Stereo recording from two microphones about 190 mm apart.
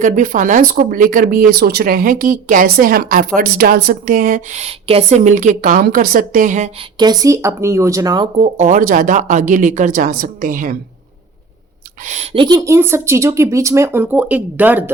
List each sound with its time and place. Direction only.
0.0 s speech: 45° right (ahead or behind)
7.0 s speech: 20° right (ahead or behind)
8.5 s speech: 40° right (ahead or behind)
12.0 s speech: 35° right (ahead or behind); by 14.9 s 10° right (ahead or behind)